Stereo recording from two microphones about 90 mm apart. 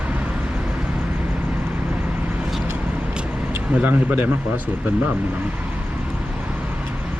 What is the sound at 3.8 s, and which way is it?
Speech, 15° right (ahead or behind).